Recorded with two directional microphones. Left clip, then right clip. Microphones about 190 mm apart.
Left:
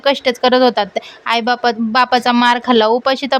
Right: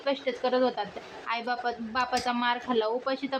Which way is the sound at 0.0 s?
65° left (ahead or behind).